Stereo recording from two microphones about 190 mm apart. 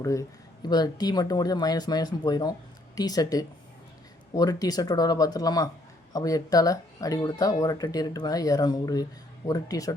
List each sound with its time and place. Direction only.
0.0 s speech: 15° left (ahead or behind)